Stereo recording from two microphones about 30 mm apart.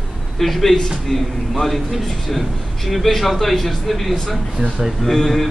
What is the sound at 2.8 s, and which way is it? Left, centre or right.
A man's voice, centre.